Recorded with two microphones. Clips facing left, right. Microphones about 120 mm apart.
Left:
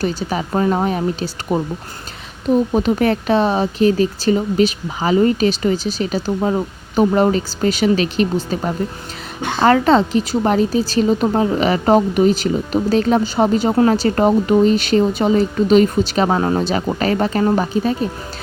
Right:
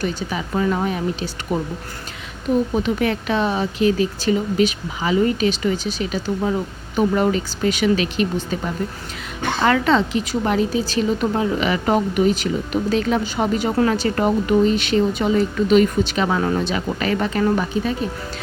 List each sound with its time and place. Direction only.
0.0 s speech: 35° left (ahead or behind)
2.7 s speech: 40° left (ahead or behind)